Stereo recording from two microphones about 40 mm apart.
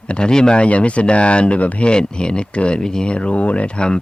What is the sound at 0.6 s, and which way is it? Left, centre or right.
Speech, left.